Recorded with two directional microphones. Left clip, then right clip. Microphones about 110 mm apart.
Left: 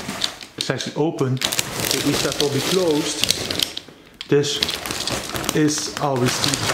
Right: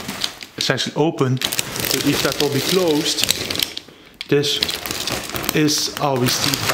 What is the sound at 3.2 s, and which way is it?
Mechanisms, 5° left (ahead or behind).